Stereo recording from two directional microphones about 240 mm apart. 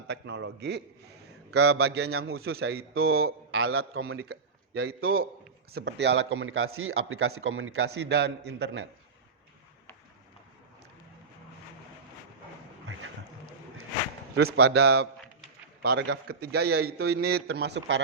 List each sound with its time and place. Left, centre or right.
0.1 s a man's voice: right
1.5 s a man's voice: right
4.1 s a man's voice: right
14.3 s a man's voice: right